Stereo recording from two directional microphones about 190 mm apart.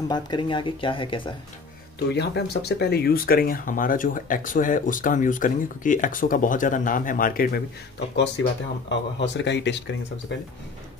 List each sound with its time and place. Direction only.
0.1 s speech: 25° left (ahead or behind)
2.0 s speech: 60° left (ahead or behind)
8.2 s speech: 70° left (ahead or behind)